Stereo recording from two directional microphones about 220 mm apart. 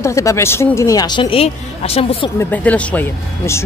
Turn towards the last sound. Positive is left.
turn(degrees=10)  # may be behind; listen again after turning